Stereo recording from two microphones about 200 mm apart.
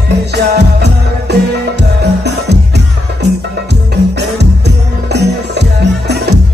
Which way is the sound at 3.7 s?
55° right (ahead or behind).